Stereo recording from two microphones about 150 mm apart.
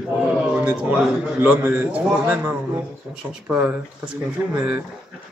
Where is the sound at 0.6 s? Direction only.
10° right (ahead or behind).